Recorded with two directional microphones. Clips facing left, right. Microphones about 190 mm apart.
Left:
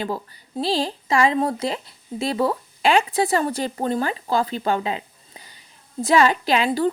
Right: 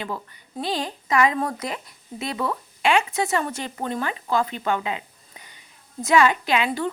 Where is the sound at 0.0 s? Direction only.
35° left (ahead or behind).